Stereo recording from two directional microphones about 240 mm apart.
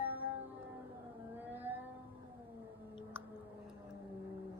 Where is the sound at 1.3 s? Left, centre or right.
Centre.